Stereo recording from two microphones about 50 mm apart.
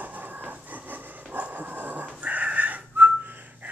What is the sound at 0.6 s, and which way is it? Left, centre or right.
Dog, right.